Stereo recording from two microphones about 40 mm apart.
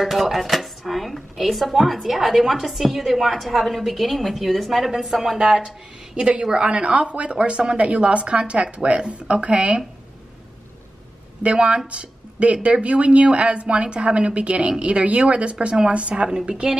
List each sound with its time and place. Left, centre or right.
0.0 s a woman's voice: centre
5.4 s a woman's voice: right
11.4 s a woman's voice: right